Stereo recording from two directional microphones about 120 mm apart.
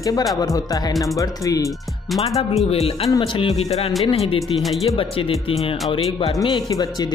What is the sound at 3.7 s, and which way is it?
Speech, 60° left (ahead or behind).